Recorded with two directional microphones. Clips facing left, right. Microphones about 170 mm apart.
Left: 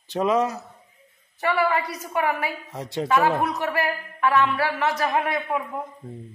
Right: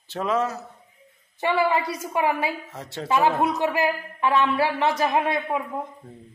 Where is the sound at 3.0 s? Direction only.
20° right (ahead or behind).